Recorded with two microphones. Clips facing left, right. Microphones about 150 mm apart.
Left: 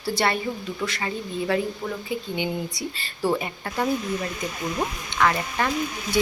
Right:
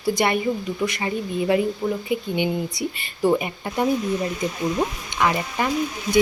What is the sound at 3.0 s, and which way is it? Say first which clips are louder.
Speech: right 4 dB; 15° right (ahead or behind).